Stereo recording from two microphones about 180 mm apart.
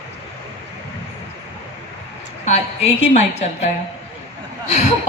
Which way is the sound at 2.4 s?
35° left (ahead or behind).